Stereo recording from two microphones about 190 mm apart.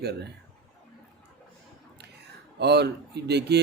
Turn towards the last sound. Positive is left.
turn(degrees=-60)  # may be behind; listen again after turning